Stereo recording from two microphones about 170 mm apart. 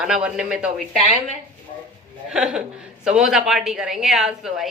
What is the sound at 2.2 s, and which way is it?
A woman's voice, 5° right (ahead or behind).